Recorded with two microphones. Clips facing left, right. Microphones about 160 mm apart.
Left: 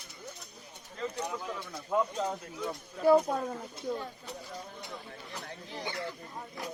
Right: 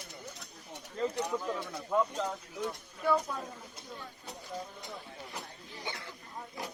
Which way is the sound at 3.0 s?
40° left (ahead or behind).